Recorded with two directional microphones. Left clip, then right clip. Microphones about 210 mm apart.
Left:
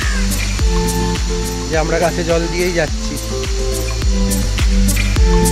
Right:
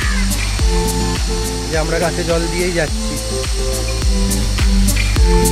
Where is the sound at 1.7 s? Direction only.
10° left (ahead or behind).